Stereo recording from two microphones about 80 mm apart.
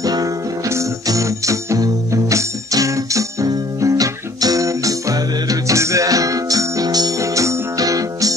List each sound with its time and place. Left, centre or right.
0.0 s music: right